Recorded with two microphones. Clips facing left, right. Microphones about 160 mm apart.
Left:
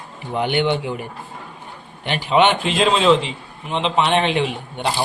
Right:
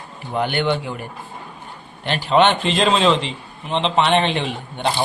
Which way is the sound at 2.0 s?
15° left (ahead or behind).